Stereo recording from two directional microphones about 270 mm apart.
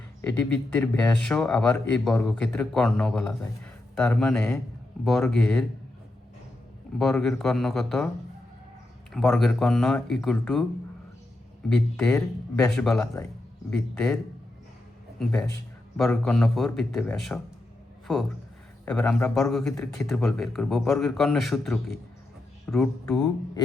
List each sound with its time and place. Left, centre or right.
0.2 s speech: centre
7.0 s speech: centre
9.1 s speech: centre
11.7 s speech: centre
15.2 s speech: centre